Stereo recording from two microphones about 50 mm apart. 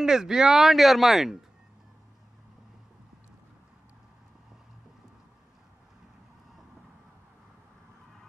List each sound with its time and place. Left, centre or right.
0.0 s speech: centre